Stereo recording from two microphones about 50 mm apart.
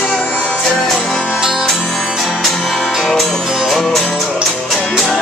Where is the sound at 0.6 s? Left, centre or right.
Centre.